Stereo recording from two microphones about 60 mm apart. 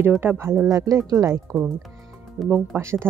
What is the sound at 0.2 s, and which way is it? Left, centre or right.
Speech, right.